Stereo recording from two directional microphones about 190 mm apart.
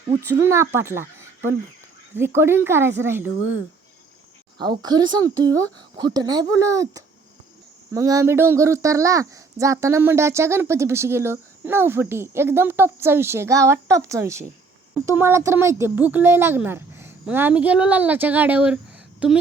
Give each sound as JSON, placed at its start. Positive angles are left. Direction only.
{"t": 0.3, "sound": "speech", "side_deg": -15}
{"t": 4.5, "sound": "a child's voice", "side_deg": -20}